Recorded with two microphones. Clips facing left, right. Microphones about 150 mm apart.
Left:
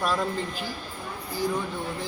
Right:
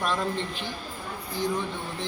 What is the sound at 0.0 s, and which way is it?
Speech, 5° left (ahead or behind).